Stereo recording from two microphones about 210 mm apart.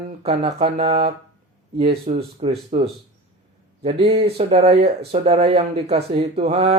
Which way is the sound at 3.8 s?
30° right (ahead or behind).